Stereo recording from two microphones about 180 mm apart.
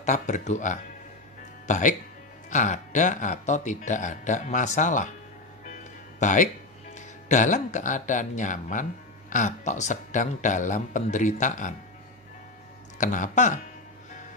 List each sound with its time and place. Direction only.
0.0 s speech: 40° left (ahead or behind)
6.1 s speech: 45° left (ahead or behind)
12.9 s speech: 45° left (ahead or behind)